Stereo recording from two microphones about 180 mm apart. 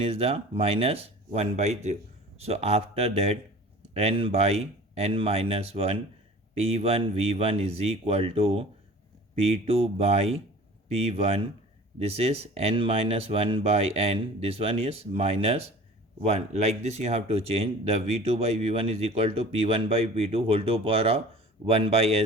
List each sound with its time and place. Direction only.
0.0 s speech: 35° right (ahead or behind)